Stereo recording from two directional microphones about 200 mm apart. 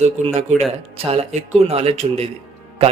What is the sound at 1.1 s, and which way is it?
A man's voice, 30° right (ahead or behind).